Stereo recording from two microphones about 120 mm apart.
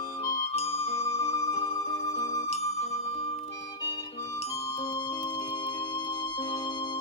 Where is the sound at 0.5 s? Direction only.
55° left (ahead or behind).